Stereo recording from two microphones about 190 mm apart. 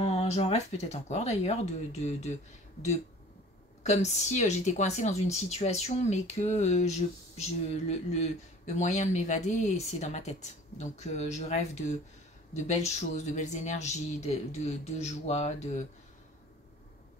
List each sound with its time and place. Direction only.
0.0 s speech: 30° left (ahead or behind)
3.8 s speech: 35° left (ahead or behind)